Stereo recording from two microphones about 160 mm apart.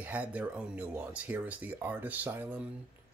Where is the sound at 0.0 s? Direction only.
10° right (ahead or behind).